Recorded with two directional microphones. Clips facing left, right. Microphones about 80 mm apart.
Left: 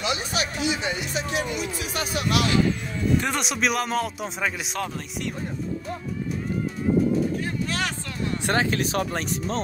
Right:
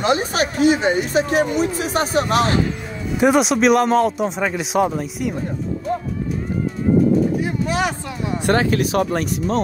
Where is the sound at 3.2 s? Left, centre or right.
Centre.